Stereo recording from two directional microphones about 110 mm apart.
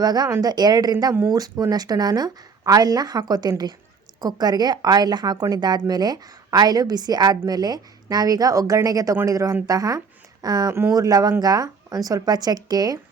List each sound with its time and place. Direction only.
0.0 s a woman's voice: 40° right (ahead or behind)